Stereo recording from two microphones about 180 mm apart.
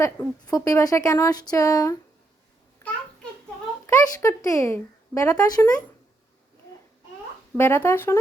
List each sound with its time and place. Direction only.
0.0 s speech: 20° left (ahead or behind)
2.8 s babbling: 15° left (ahead or behind)
3.8 s speech: 15° left (ahead or behind)
7.5 s speech: 15° left (ahead or behind)